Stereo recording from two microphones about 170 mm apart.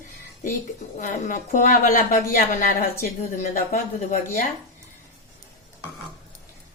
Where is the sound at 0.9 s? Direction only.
50° left (ahead or behind).